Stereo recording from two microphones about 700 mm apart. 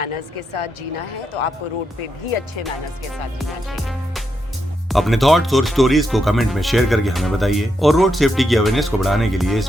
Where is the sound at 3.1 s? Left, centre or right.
Centre.